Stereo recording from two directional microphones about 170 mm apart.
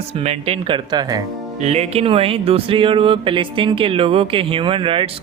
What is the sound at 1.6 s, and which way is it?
Speech, 40° right (ahead or behind).